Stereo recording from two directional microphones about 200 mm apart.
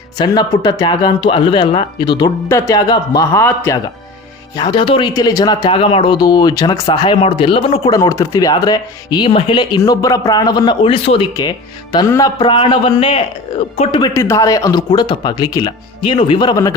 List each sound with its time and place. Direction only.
0.2 s speech: 20° left (ahead or behind)
4.5 s speech: 20° left (ahead or behind)
14.1 s speech: 15° left (ahead or behind)